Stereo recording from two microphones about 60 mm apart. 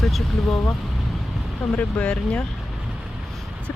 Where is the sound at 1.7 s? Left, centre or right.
Centre.